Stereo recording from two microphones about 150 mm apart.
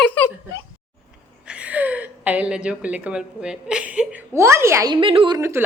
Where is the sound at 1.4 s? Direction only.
10° right (ahead or behind); by 5.4 s 35° right (ahead or behind).